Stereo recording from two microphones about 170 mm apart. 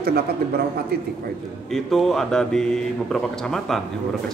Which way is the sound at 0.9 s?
65° right (ahead or behind).